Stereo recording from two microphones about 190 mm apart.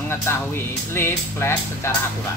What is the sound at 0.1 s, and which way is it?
Speech, 15° left (ahead or behind).